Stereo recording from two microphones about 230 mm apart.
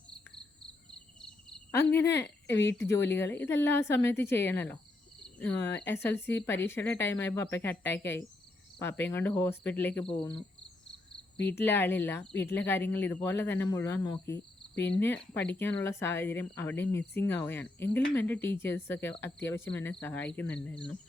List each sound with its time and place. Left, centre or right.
0.1 s cricket: centre
2.7 s a woman's voice: centre
11.4 s a woman's voice: centre